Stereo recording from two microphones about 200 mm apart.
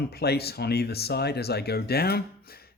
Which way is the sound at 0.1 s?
55° left (ahead or behind).